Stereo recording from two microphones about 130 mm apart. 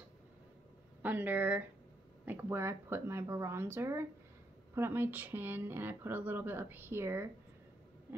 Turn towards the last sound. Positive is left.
turn(degrees=-20)  # may be behind; listen again after turning